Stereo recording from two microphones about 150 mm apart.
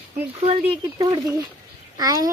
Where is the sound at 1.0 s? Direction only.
25° right (ahead or behind).